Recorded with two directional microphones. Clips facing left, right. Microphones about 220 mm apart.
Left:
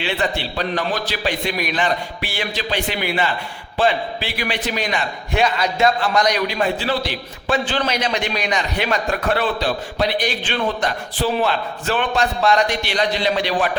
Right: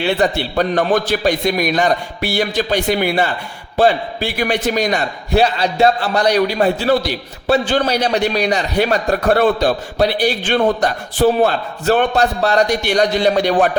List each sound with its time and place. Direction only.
0.0 s a man's voice: 45° right (ahead or behind)